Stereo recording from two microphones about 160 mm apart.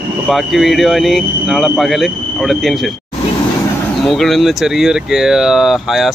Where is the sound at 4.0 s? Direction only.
Centre (ahead or behind).